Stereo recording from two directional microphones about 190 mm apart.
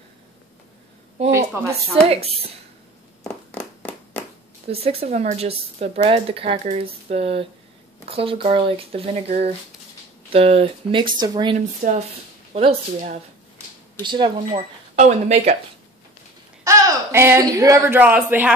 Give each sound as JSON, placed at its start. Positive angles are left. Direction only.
{"t": 1.2, "sound": "a sound", "side_deg": -35}
{"t": 2.0, "sound": "speech", "side_deg": -30}
{"t": 3.3, "sound": "a sound", "side_deg": 5}
{"t": 4.6, "sound": "speech", "side_deg": -30}
{"t": 11.8, "sound": "speech", "side_deg": -45}
{"t": 12.5, "sound": "speech", "side_deg": -35}
{"t": 15.0, "sound": "speech", "side_deg": -35}
{"t": 16.6, "sound": "speech", "side_deg": -15}